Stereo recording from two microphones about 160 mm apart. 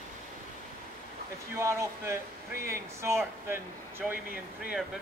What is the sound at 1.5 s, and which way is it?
Speech, 15° right (ahead or behind).